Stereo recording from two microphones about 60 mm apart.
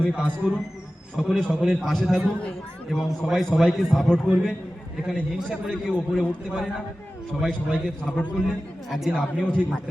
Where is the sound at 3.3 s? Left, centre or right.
Centre.